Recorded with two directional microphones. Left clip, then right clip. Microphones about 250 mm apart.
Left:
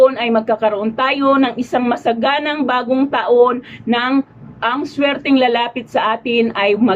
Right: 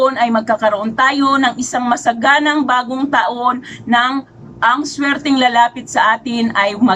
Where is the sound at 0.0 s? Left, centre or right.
Centre.